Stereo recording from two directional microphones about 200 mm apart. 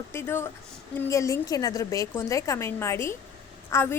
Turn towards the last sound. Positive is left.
turn(degrees=10)  # may be behind; listen again after turning